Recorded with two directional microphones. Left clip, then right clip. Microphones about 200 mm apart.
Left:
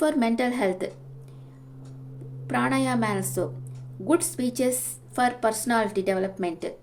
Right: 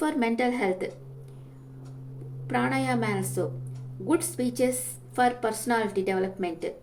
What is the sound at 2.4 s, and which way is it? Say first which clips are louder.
A woman's voice: left 2 dB; 45° left (ahead or behind).